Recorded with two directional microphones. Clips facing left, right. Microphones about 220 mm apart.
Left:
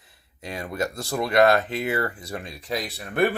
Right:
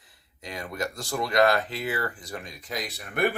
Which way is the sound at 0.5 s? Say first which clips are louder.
Left 4 dB; 25° left (ahead or behind).